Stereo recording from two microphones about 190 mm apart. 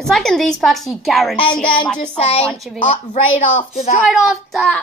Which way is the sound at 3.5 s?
35° left (ahead or behind).